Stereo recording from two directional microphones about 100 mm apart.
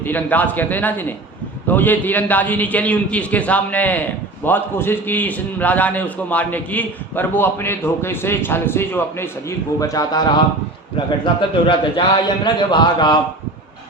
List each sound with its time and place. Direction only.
0.0 s a man's voice: 15° left (ahead or behind); by 10.4 s 45° left (ahead or behind)
11.2 s a man's voice: 55° left (ahead or behind)